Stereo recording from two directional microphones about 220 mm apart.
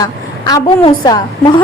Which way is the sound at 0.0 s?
15° left (ahead or behind).